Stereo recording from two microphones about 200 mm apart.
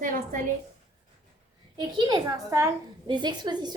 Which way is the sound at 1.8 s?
20° right (ahead or behind).